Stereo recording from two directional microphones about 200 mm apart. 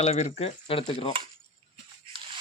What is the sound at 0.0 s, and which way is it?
Speech, 30° left (ahead or behind).